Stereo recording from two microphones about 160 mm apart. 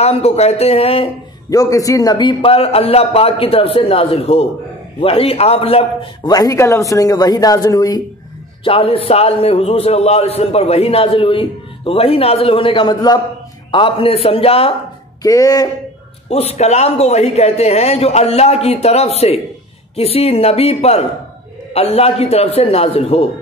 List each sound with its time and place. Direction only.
0.0 s a man's voice: 40° left (ahead or behind)
1.5 s a man's voice: 20° left (ahead or behind); by 5.9 s 40° left (ahead or behind)
6.2 s speech: 20° left (ahead or behind)
8.6 s a man's voice: 35° left (ahead or behind)
15.2 s speech: 20° left (ahead or behind)
16.3 s a man's voice: 40° left (ahead or behind)